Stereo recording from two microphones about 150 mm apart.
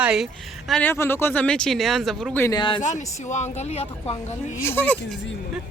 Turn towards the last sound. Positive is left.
turn(degrees=15)  # may be behind; listen again after turning